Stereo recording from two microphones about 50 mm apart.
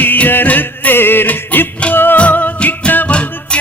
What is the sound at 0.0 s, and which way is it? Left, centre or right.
Music, left.